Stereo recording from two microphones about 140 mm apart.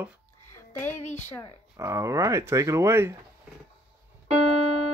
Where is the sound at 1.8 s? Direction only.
20° right (ahead or behind).